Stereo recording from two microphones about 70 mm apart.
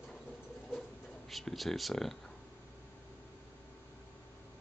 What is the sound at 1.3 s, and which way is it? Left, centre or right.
Speech, centre.